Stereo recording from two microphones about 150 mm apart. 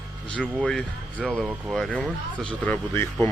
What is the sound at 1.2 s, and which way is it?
Speech, 5° left (ahead or behind).